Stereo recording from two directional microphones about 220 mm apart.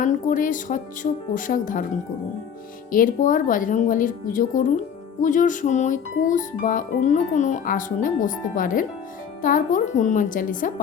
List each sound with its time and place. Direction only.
0.0 s music: 35° left (ahead or behind)
2.9 s music: 40° left (ahead or behind)